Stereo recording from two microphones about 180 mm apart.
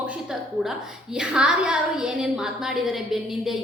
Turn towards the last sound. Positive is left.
turn(degrees=0)  # may be behind; listen again after turning